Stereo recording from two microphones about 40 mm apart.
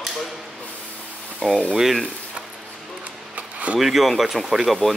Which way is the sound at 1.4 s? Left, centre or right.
Centre.